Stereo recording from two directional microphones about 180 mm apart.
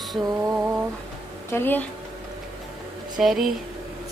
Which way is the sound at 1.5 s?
10° left (ahead or behind).